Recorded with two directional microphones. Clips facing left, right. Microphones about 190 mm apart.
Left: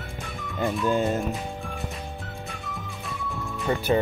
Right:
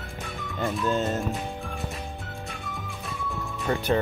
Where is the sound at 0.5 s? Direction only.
Centre (ahead or behind).